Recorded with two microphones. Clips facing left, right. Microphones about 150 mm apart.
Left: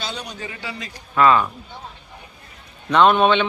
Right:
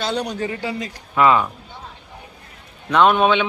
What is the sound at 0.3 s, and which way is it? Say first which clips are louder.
Speech: right 8 dB; 40° right (ahead or behind).